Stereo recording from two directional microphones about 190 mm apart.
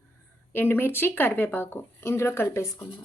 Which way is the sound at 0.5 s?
10° left (ahead or behind).